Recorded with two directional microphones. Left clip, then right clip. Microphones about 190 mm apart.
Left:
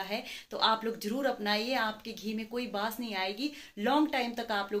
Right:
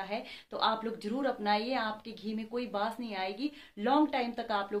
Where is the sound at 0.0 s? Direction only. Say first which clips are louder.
Left 1 dB; centre (ahead or behind).